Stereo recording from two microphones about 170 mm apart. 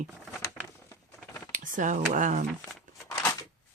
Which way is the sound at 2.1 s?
50° right (ahead or behind).